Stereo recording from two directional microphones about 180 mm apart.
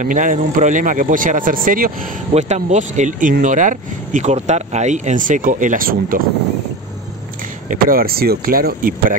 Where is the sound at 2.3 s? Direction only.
40° right (ahead or behind).